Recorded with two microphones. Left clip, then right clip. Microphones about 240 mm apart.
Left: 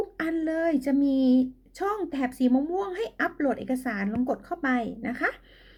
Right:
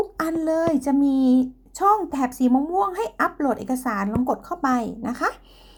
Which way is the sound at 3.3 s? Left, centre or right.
Right.